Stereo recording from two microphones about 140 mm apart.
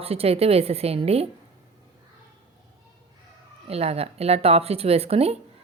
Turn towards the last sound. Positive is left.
turn(degrees=-45)  # may be behind; listen again after turning